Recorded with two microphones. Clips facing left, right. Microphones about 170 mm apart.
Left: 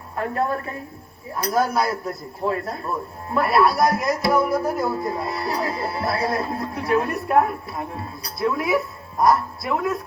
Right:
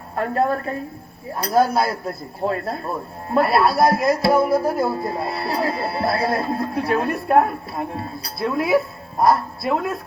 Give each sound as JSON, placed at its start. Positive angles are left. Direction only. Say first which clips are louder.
{"t": 0.2, "sound": "a woman's voice", "louder": "right 3 dB", "side_deg": -35}